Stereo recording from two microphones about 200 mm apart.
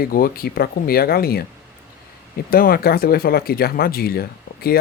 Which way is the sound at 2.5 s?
45° left (ahead or behind).